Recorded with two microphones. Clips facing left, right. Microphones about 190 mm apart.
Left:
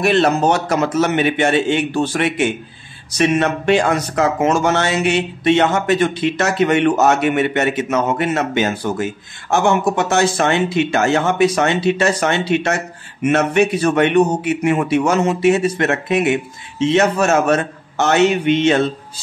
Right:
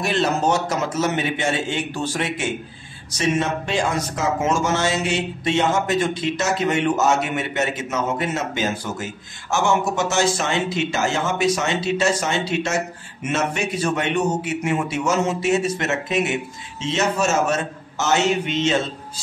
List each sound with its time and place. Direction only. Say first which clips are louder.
0.0 s speech: left 6 dB; 65° left (ahead or behind)